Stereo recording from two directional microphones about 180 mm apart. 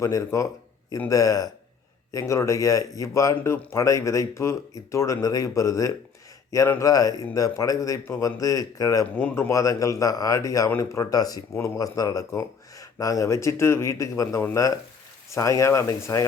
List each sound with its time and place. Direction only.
0.0 s speech: 15° left (ahead or behind)